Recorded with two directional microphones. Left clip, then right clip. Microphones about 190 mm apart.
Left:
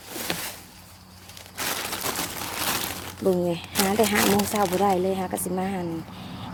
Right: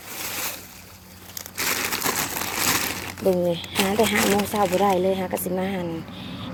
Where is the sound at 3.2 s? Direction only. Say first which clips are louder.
Right 2 dB; 25° left (ahead or behind).